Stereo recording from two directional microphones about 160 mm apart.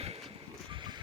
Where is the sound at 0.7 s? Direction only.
30° right (ahead or behind).